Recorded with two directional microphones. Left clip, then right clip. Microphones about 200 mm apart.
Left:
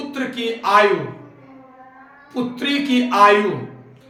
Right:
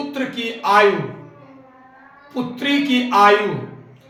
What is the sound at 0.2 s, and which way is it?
Speech, 25° left (ahead or behind).